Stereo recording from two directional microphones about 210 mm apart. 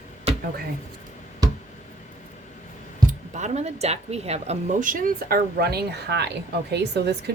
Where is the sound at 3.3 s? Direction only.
30° right (ahead or behind).